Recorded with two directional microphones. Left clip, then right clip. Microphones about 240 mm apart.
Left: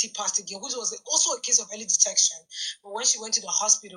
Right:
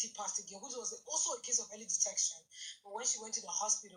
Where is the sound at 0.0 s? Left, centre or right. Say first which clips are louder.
Left 12 dB; left.